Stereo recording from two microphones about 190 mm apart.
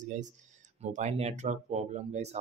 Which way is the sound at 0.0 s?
40° right (ahead or behind).